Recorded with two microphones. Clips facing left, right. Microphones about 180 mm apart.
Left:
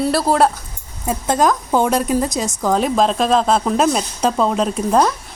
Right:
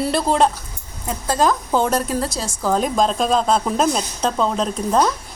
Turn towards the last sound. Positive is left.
turn(degrees=5)  # may be behind; listen again after turning